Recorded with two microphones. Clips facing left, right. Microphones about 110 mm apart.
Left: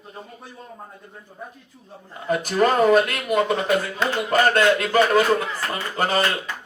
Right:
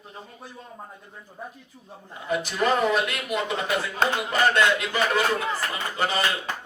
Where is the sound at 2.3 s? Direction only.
45° left (ahead or behind).